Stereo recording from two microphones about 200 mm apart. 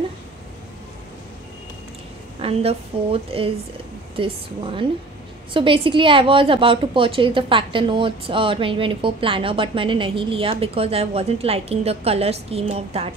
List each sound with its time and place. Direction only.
2.4 s a woman's voice: 30° right (ahead or behind)